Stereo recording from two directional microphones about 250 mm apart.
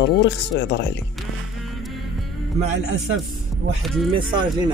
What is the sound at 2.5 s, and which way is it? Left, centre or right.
Speech, right.